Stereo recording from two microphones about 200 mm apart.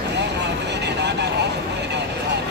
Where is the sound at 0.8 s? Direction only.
55° right (ahead or behind).